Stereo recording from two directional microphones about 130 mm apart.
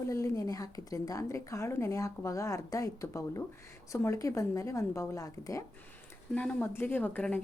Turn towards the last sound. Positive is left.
turn(degrees=10)  # may be behind; listen again after turning